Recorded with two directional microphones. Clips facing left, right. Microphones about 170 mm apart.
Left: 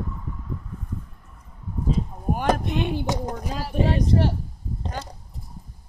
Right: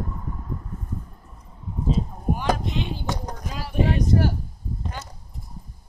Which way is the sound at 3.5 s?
35° left (ahead or behind).